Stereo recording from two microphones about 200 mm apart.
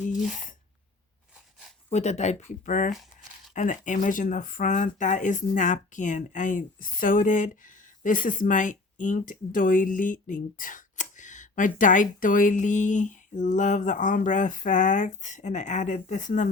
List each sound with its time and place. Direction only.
1.9 s speech: 35° left (ahead or behind)